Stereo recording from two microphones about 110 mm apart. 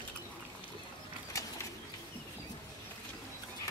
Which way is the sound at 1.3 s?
30° left (ahead or behind).